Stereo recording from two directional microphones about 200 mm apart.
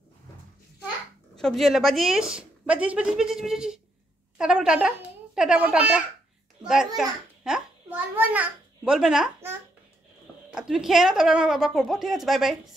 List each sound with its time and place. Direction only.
1.3 s a woman's voice: centre (ahead or behind)